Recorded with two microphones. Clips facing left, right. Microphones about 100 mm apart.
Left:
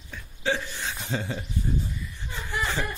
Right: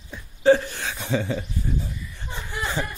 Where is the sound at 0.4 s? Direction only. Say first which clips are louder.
Right 11 dB; 45° right (ahead or behind).